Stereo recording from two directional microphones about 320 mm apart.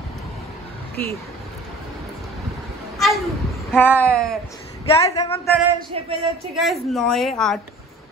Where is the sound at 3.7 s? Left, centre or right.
Centre.